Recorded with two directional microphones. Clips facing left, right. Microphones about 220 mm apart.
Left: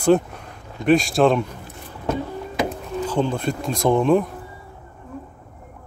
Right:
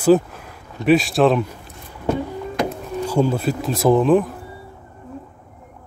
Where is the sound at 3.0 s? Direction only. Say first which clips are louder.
Right 3 dB; 10° right (ahead or behind).